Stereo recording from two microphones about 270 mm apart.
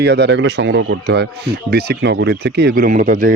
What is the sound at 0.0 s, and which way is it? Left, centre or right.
Speech, right.